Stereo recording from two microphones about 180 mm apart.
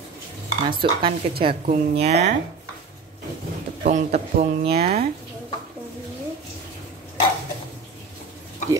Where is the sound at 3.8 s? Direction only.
35° right (ahead or behind).